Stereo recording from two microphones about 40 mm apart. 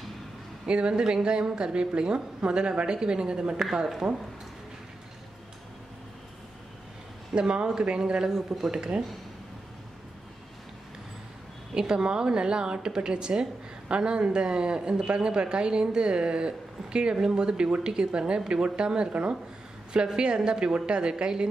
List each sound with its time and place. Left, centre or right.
0.7 s a woman's voice: right
3.7 s speech: centre
7.3 s a woman's voice: right
8.7 s a woman's voice: right
11.7 s a woman's voice: centre